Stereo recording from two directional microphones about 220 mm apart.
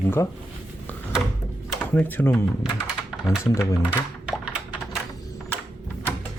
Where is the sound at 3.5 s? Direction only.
10° left (ahead or behind).